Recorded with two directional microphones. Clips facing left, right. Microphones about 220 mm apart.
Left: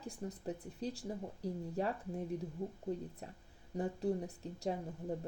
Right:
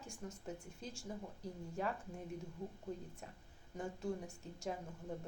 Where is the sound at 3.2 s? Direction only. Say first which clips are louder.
Left 4 dB; 35° left (ahead or behind).